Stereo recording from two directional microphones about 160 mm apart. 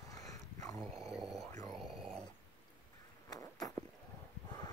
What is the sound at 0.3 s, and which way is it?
Dog, 20° left (ahead or behind).